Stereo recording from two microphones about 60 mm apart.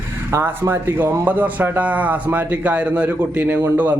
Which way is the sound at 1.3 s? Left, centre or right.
Right.